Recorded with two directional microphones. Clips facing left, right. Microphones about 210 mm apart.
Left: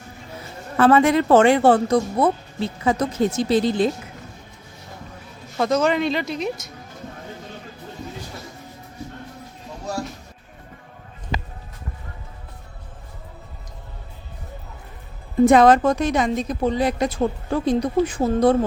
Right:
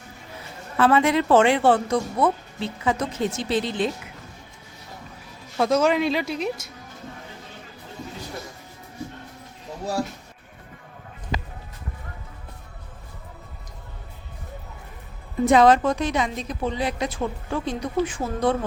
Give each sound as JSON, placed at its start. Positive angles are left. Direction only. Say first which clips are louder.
{"t": 0.8, "sound": "speech", "louder": "left 4 dB", "side_deg": 45}
{"t": 5.5, "sound": "speech", "louder": "even", "side_deg": -5}
{"t": 15.4, "sound": "a woman's voice", "louder": "left 2 dB", "side_deg": 50}